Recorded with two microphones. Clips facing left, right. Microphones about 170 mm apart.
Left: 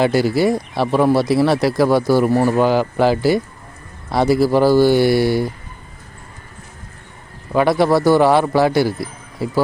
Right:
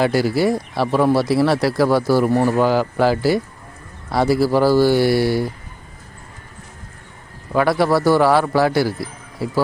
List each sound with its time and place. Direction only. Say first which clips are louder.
0.0 s speech: left 2 dB; 20° left (ahead or behind)
7.5 s speech: left 2 dB; 20° left (ahead or behind)